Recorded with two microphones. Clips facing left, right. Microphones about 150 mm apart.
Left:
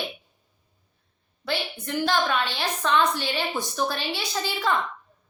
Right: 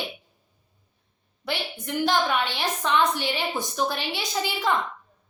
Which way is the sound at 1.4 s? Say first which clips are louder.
Left 1 dB; 15° right (ahead or behind).